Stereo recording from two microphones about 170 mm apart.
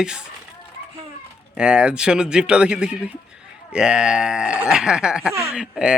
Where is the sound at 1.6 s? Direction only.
5° right (ahead or behind).